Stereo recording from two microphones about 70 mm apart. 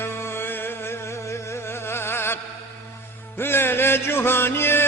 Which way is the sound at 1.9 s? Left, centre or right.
Left.